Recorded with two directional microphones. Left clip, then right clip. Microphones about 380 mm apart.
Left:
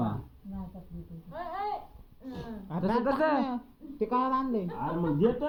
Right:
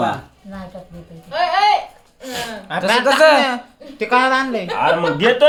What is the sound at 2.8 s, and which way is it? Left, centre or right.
Speech, centre.